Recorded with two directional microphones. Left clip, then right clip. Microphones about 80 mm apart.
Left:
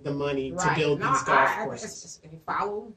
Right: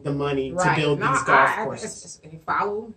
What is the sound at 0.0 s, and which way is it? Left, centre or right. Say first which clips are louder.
Speech: right 4 dB; right.